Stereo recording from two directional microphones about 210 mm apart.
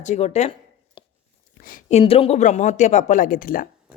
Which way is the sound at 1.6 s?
40° left (ahead or behind).